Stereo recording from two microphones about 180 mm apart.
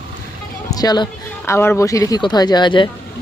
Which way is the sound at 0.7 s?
20° left (ahead or behind).